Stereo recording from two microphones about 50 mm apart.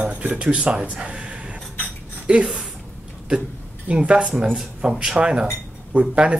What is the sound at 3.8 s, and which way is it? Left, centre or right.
Speech, right.